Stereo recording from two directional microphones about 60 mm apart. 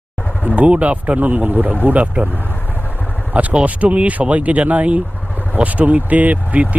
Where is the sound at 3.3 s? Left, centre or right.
Right.